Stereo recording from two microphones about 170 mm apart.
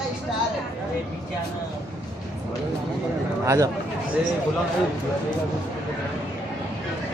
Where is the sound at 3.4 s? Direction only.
20° right (ahead or behind).